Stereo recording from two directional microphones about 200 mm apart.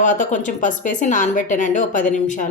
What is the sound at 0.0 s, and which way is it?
Speech, 40° left (ahead or behind).